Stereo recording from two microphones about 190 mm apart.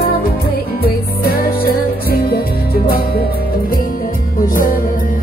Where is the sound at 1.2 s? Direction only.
50° left (ahead or behind).